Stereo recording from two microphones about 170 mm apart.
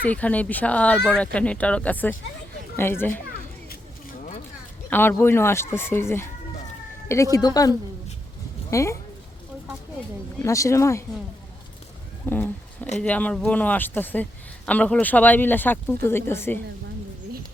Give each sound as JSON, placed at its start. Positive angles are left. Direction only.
{"t": 0.0, "sound": "speech", "side_deg": 10}
{"t": 4.9, "sound": "speech", "side_deg": 15}
{"t": 8.7, "sound": "speech", "side_deg": 15}
{"t": 10.4, "sound": "speech", "side_deg": 15}
{"t": 12.2, "sound": "a sound", "side_deg": 10}
{"t": 13.0, "sound": "speech", "side_deg": 10}